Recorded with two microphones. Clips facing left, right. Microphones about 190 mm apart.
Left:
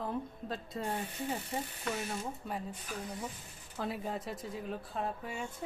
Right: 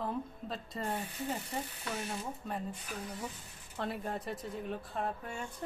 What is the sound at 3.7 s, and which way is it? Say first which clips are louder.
Speech: even; centre (ahead or behind).